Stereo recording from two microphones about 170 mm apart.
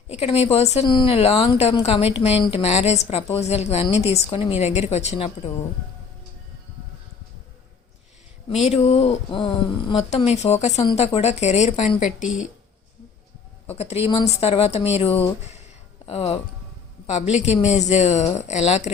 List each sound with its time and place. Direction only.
0.1 s a woman's voice: 40° left (ahead or behind)
8.4 s a woman's voice: 40° left (ahead or behind)
13.7 s a woman's voice: 40° left (ahead or behind)